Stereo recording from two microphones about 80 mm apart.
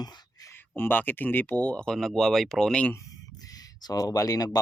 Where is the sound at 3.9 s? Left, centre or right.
Left.